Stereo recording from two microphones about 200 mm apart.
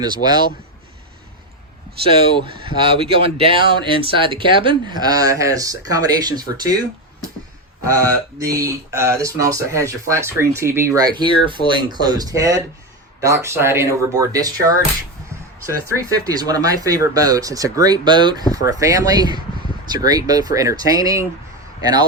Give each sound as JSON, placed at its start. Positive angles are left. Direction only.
{"t": 0.0, "sound": "speech", "side_deg": -20}
{"t": 2.6, "sound": "speech", "side_deg": -25}
{"t": 7.9, "sound": "speech", "side_deg": -15}